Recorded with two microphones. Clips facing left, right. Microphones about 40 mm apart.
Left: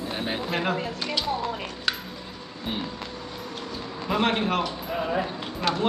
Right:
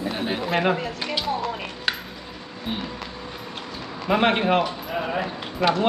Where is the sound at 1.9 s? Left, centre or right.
Right.